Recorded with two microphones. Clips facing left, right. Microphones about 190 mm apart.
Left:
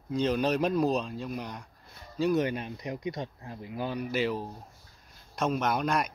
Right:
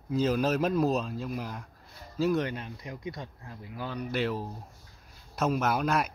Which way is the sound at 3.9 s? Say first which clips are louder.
Even; centre (ahead or behind).